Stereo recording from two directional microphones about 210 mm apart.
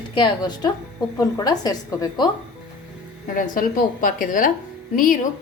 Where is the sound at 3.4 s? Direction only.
40° left (ahead or behind).